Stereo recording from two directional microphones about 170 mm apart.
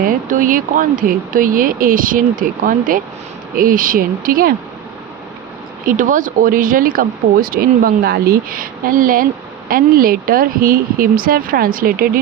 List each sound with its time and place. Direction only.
0.0 s speech: 55° right (ahead or behind)
5.8 s speech: 50° right (ahead or behind)